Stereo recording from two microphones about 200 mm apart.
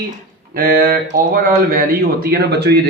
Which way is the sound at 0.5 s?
45° right (ahead or behind).